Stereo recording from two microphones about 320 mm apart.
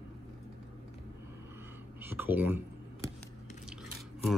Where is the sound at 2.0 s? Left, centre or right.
Centre.